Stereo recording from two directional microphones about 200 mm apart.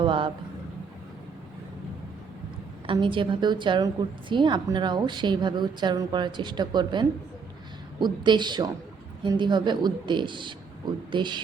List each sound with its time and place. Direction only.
0.0 s vehicle: 25° right (ahead or behind)
2.8 s a woman's voice: 25° right (ahead or behind)